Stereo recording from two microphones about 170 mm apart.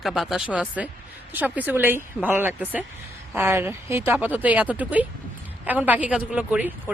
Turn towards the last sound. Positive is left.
turn(degrees=-10)  # may be behind; listen again after turning